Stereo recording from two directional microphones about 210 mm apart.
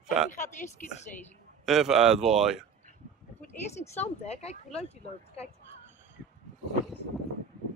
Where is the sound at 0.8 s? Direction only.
40° left (ahead or behind).